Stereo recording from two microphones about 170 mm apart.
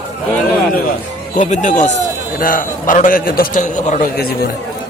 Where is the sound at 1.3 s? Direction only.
45° left (ahead or behind).